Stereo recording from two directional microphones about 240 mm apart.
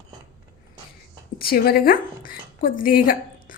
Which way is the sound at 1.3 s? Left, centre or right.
Left.